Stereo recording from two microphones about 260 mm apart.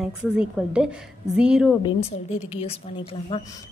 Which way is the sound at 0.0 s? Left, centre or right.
Centre.